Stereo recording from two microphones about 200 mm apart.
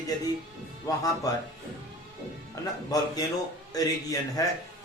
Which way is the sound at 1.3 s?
15° left (ahead or behind).